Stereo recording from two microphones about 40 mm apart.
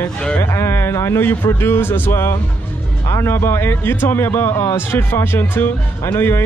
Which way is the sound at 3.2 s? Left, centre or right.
Left.